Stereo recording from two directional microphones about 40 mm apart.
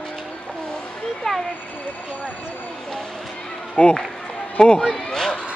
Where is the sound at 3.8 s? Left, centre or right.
Left.